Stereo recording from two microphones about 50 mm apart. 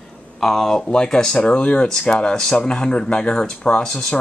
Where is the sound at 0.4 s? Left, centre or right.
Centre.